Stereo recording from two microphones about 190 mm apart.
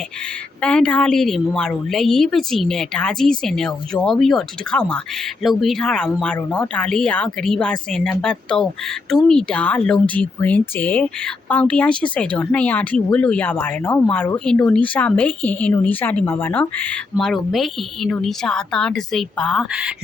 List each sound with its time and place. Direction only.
0.6 s a woman's voice: 5° left (ahead or behind)